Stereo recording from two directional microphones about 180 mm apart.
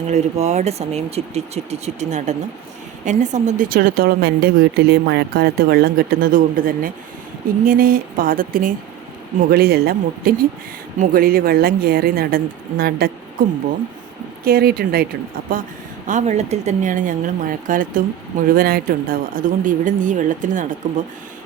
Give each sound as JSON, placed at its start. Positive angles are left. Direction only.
{"t": 0.1, "sound": "a woman's voice", "side_deg": -40}